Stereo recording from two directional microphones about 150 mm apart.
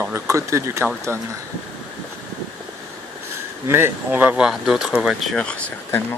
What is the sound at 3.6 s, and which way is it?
Speech, 15° right (ahead or behind).